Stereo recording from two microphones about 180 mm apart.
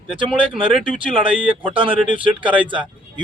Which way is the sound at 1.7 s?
30° right (ahead or behind).